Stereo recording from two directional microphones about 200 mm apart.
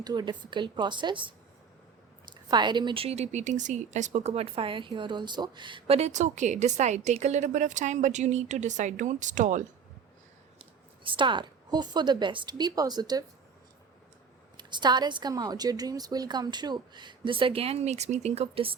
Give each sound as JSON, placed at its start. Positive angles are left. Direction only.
{"t": 0.0, "sound": "a woman's voice", "side_deg": -20}
{"t": 2.3, "sound": "speech", "side_deg": -20}
{"t": 11.0, "sound": "a woman's voice", "side_deg": -25}
{"t": 14.5, "sound": "a woman's voice", "side_deg": -20}